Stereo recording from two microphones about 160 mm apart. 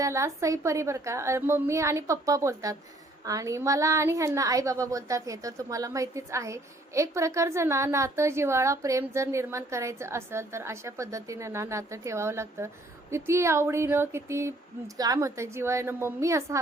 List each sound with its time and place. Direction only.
0.0 s a woman's voice: 20° right (ahead or behind)